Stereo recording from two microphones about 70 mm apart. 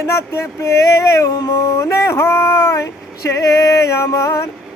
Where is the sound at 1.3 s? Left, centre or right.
Left.